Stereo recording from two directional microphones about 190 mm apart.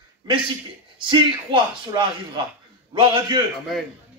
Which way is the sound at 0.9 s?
25° right (ahead or behind).